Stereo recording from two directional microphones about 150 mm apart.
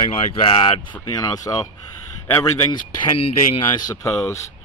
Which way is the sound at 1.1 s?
25° left (ahead or behind).